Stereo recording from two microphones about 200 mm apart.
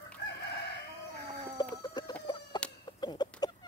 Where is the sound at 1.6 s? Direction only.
20° left (ahead or behind).